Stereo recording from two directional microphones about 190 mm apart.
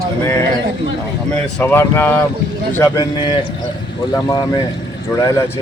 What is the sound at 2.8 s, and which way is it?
A man's voice, 20° left (ahead or behind).